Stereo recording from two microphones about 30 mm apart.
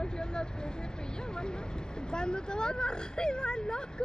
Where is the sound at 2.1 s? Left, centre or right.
Left.